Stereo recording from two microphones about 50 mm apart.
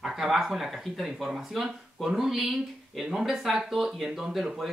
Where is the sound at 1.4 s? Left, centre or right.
Centre.